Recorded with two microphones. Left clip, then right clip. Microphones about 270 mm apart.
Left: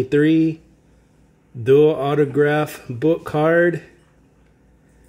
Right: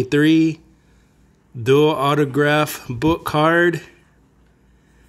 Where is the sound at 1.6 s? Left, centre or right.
Centre.